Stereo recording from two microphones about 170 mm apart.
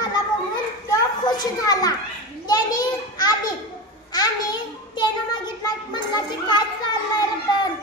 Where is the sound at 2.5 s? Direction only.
25° left (ahead or behind).